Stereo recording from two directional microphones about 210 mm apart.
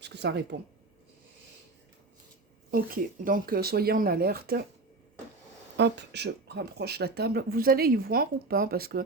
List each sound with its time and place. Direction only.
0.0 s speech: 55° right (ahead or behind)
2.7 s speech: 40° right (ahead or behind)
5.7 s speech: 55° right (ahead or behind)